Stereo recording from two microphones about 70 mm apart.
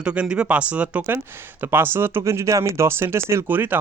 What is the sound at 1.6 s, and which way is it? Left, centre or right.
Speech, right.